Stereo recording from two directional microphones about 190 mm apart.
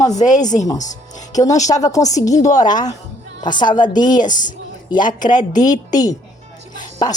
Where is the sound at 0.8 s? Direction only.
40° left (ahead or behind).